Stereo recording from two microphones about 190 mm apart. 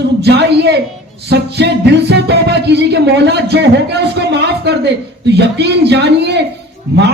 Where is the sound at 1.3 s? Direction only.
60° right (ahead or behind).